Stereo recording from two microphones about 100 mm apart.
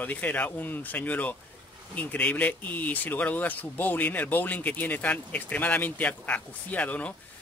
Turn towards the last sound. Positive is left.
turn(degrees=15)  # may be behind; listen again after turning